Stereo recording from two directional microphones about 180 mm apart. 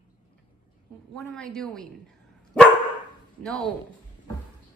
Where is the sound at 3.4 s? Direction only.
5° left (ahead or behind).